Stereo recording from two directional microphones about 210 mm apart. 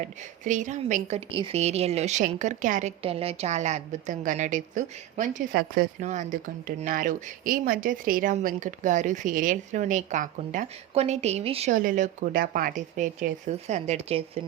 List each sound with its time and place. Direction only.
0.0 s a woman's voice: 35° right (ahead or behind)